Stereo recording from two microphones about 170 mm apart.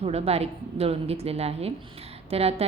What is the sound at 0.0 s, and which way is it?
A woman's voice, 35° right (ahead or behind).